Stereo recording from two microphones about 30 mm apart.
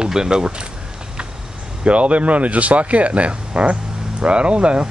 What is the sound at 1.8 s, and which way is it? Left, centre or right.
Speech, right.